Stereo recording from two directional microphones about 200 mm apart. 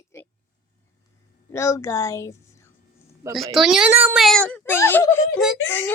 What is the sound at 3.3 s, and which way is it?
A woman's voice, centre (ahead or behind).